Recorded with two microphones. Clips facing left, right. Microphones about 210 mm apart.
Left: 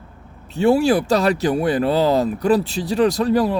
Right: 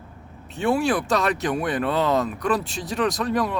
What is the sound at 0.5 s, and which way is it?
Speech, 35° left (ahead or behind).